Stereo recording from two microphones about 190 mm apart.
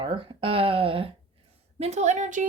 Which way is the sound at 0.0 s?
30° right (ahead or behind).